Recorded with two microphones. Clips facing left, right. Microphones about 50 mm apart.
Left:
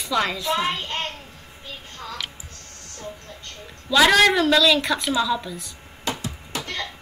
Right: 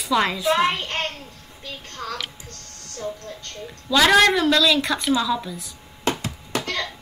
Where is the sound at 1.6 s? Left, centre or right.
Right.